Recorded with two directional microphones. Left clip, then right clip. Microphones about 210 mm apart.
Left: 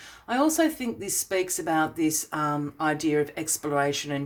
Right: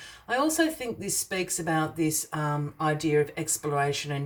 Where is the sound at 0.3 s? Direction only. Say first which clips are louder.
Left 2 dB; 30° left (ahead or behind).